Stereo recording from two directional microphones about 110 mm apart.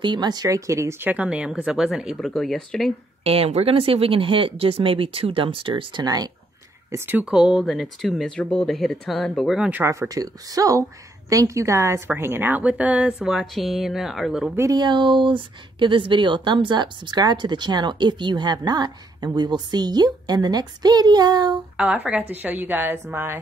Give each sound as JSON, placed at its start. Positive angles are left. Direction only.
{"t": 0.0, "sound": "speech", "side_deg": -40}
{"t": 3.3, "sound": "speech", "side_deg": -65}
{"t": 6.9, "sound": "speech", "side_deg": -25}
{"t": 7.2, "sound": "speech", "side_deg": -5}
{"t": 9.8, "sound": "a woman's voice", "side_deg": -30}
{"t": 14.5, "sound": "a woman's voice", "side_deg": -25}
{"t": 14.8, "sound": "a woman's voice", "side_deg": -45}
{"t": 21.7, "sound": "a woman's voice", "side_deg": -10}